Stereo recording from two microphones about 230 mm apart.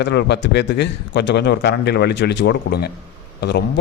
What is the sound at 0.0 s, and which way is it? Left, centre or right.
Speech, left.